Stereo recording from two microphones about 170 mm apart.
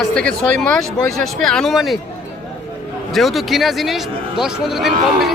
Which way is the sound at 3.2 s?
Centre (ahead or behind).